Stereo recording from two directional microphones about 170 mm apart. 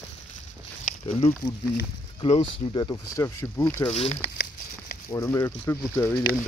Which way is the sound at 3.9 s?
35° left (ahead or behind).